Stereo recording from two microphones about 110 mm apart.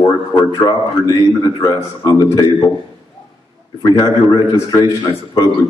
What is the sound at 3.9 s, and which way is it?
Speech, 30° left (ahead or behind).